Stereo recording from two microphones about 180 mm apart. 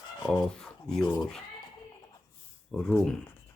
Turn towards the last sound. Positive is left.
turn(degrees=5)  # may be behind; listen again after turning